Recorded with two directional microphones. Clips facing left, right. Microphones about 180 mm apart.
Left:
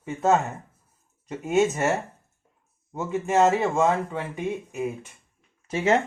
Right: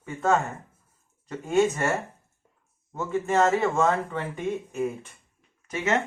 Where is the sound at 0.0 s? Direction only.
20° left (ahead or behind).